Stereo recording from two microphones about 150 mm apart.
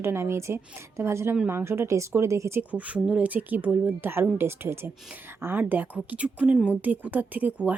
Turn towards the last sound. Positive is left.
turn(degrees=-10)  # may be behind; listen again after turning